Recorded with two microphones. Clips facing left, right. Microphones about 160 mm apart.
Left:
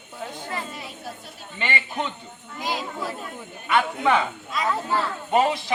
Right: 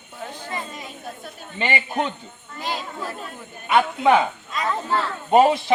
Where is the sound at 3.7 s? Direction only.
20° right (ahead or behind).